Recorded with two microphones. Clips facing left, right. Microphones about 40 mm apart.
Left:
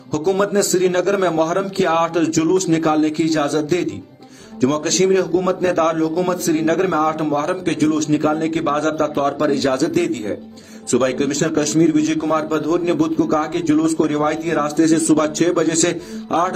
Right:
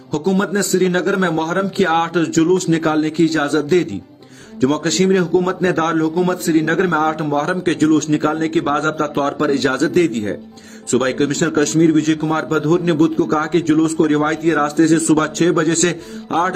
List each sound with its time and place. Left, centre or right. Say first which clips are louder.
0.4 s a man's voice: left 1 dB; right